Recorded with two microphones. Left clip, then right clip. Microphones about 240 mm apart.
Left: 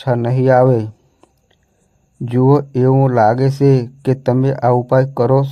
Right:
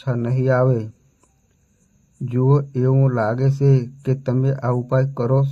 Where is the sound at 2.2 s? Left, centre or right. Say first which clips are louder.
Left 7 dB; left.